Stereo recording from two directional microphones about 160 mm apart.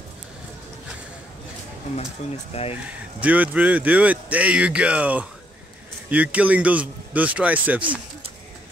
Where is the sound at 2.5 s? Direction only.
40° left (ahead or behind).